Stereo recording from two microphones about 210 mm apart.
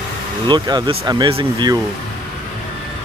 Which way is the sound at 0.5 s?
20° right (ahead or behind).